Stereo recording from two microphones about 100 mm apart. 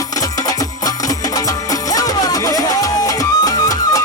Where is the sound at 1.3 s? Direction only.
35° left (ahead or behind).